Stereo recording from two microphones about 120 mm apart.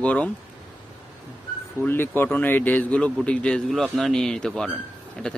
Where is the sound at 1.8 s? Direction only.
15° left (ahead or behind).